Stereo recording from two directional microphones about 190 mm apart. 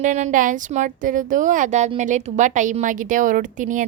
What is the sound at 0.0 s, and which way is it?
A woman's voice, 40° right (ahead or behind).